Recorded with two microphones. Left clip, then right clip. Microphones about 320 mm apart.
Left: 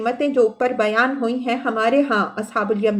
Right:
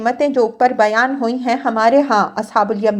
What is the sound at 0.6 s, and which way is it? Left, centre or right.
A woman's voice, centre.